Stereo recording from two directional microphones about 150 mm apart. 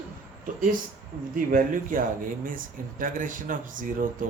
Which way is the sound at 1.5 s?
65° right (ahead or behind).